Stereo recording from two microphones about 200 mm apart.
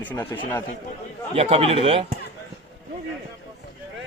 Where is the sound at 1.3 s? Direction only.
30° right (ahead or behind).